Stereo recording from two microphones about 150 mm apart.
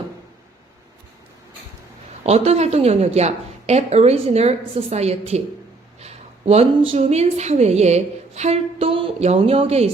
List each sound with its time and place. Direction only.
2.2 s a woman's voice: 45° right (ahead or behind)